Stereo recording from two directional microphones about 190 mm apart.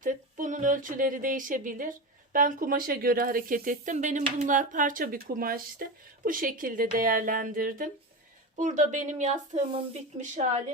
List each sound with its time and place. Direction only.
0.0 s speech: 45° right (ahead or behind)